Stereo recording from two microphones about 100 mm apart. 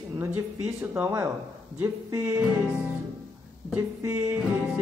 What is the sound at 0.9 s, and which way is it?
Music, 25° right (ahead or behind).